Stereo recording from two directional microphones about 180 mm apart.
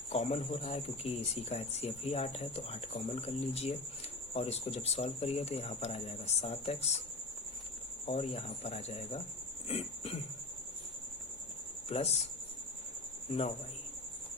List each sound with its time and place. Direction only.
0.1 s speech: 35° left (ahead or behind)
8.0 s speech: 30° left (ahead or behind)
9.6 s cough: 35° left (ahead or behind)
11.9 s speech: 35° left (ahead or behind)